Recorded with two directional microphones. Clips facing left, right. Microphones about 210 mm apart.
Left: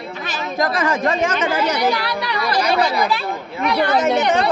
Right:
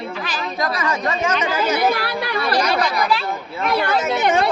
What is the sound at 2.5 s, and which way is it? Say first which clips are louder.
Speech: left 2 dB; 25° left (ahead or behind).